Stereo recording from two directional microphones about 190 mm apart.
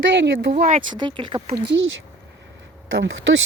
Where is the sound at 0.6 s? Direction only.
40° right (ahead or behind).